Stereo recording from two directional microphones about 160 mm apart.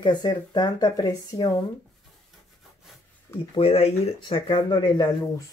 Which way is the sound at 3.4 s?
35° left (ahead or behind).